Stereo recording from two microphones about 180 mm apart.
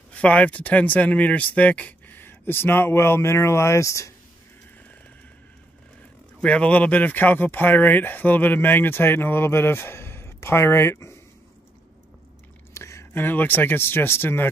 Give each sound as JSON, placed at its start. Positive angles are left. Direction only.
{"t": 0.1, "sound": "speech", "side_deg": 5}
{"t": 6.4, "sound": "speech", "side_deg": 5}
{"t": 12.7, "sound": "speech", "side_deg": 15}